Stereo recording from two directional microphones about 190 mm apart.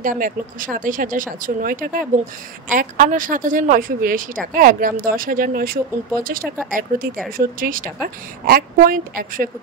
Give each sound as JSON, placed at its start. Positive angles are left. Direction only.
{"t": 0.0, "sound": "a woman's voice", "side_deg": -45}